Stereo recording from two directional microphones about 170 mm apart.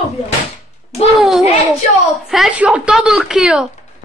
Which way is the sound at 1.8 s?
45° left (ahead or behind).